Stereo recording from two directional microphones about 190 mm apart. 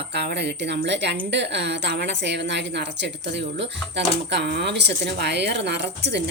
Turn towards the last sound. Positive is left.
turn(degrees=-65)  # may be behind; listen again after turning